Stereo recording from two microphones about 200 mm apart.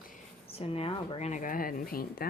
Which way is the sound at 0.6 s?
30° left (ahead or behind).